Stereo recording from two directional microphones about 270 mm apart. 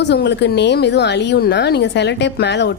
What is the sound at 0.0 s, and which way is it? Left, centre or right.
A woman's voice, left.